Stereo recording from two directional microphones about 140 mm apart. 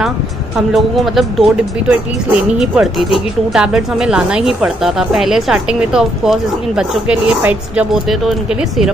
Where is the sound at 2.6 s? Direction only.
5° right (ahead or behind).